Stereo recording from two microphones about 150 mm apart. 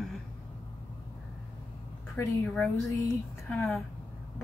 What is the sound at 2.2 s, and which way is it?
Speech, 20° left (ahead or behind).